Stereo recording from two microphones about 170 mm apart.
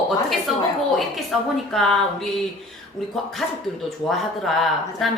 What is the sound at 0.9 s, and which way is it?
Speech, centre (ahead or behind).